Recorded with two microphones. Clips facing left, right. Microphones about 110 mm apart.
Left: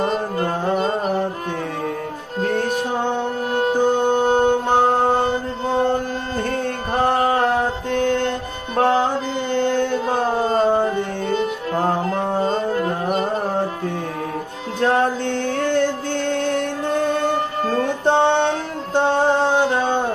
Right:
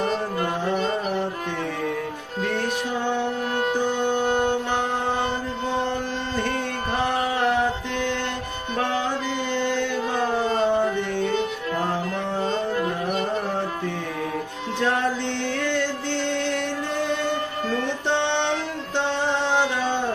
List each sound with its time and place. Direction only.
0.0 s music: 35° left (ahead or behind)
2.4 s music: 45° left (ahead or behind)
5.8 s a sound: 45° left (ahead or behind)
7.1 s music: 45° left (ahead or behind)
8.7 s carnatic music: 45° left (ahead or behind)
14.8 s music: 45° left (ahead or behind)